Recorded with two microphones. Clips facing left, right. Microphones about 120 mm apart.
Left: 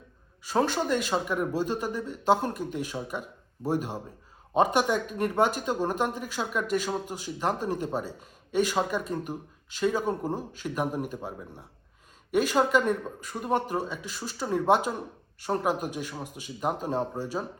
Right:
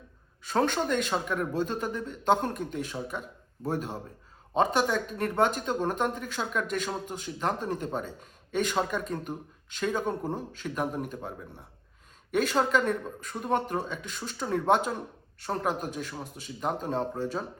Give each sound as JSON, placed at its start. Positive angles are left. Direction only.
{"t": 0.4, "sound": "speech", "side_deg": 5}